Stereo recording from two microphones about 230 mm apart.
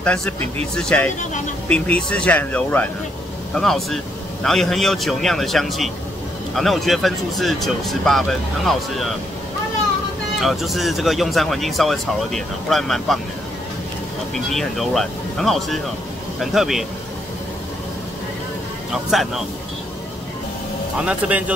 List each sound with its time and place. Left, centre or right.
0.0 s speech: centre
10.4 s speech: centre
14.3 s speech: centre
19.0 s speech: centre
21.0 s a man's voice: centre